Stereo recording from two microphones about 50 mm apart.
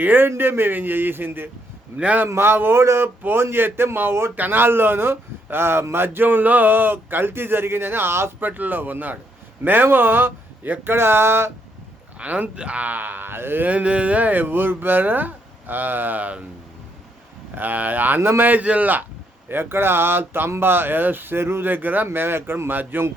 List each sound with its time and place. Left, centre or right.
0.0 s speech: right
2.8 s speech: right
3.2 s speech: right
8.4 s speech: right
12.2 s speech: right
13.7 s speech: right
17.5 s speech: right
18.2 s speech: right
18.4 s speech: right
19.5 s speech: right
22.8 s speech: right